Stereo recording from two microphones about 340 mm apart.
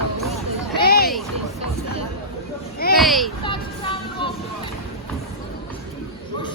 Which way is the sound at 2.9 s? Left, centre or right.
Centre.